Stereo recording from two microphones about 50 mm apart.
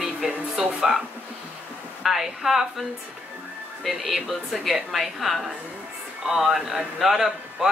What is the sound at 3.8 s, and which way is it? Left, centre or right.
Speech, centre.